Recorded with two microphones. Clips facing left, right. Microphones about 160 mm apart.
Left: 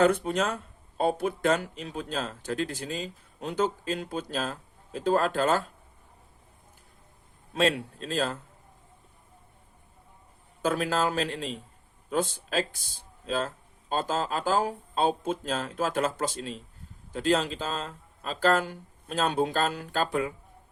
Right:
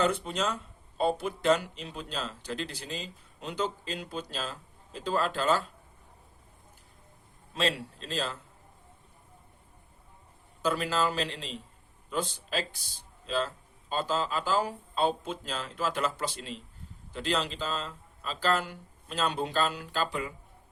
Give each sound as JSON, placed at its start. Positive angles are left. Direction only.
{"t": 0.0, "sound": "speech", "side_deg": 55}
{"t": 7.5, "sound": "speech", "side_deg": 50}
{"t": 10.6, "sound": "speech", "side_deg": 50}